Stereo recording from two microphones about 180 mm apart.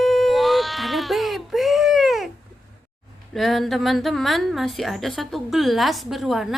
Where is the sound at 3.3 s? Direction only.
Centre (ahead or behind).